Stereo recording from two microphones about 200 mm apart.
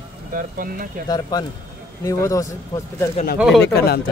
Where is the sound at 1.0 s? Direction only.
20° left (ahead or behind).